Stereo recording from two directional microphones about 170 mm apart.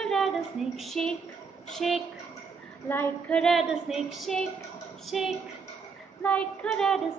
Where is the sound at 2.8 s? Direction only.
10° left (ahead or behind).